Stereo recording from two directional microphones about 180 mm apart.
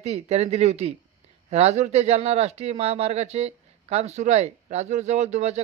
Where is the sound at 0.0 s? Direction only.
35° right (ahead or behind).